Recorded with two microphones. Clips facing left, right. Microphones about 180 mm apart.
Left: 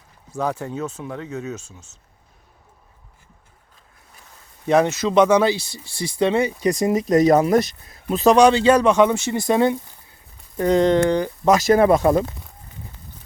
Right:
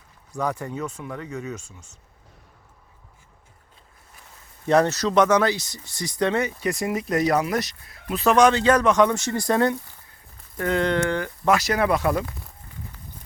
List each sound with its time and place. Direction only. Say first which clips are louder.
0.3 s speech: left 2 dB; 25° left (ahead or behind)
4.6 s speech: left 2 dB; 15° left (ahead or behind)
10.7 s speech: left 6 dB; 35° left (ahead or behind)
12.0 s speech: left 6 dB; 25° left (ahead or behind)